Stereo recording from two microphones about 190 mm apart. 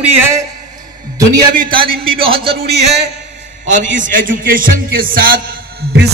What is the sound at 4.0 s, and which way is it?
A man's voice, 45° right (ahead or behind).